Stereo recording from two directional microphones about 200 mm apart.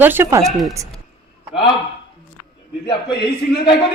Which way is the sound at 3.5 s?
55° left (ahead or behind).